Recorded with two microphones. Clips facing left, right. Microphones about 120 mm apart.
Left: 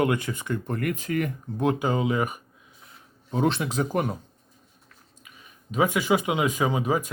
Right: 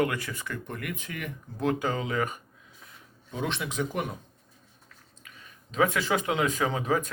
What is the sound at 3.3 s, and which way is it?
Speech, 40° left (ahead or behind).